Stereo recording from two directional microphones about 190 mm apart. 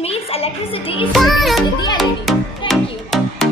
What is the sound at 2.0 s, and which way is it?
Music, centre (ahead or behind).